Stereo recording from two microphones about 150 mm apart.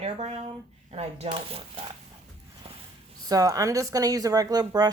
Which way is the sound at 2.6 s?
40° right (ahead or behind).